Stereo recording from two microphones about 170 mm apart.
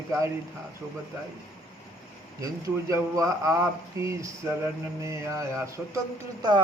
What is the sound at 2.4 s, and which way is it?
Speech, 20° right (ahead or behind).